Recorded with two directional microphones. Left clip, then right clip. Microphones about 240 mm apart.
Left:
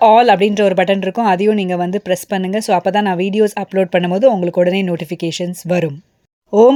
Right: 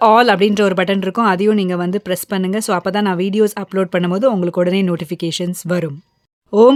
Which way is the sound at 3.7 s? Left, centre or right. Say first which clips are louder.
Left 4 dB; right.